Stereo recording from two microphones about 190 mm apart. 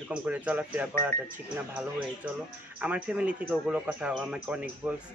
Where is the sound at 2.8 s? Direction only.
5° right (ahead or behind).